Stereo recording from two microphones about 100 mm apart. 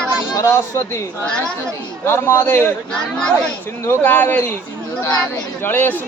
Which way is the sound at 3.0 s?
10° left (ahead or behind).